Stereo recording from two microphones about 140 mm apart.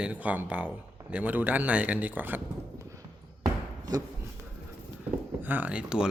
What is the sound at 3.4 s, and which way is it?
Chopping, 25° right (ahead or behind).